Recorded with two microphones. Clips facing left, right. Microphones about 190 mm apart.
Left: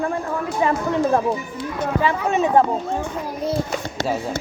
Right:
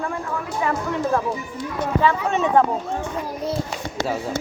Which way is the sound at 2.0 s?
5° left (ahead or behind).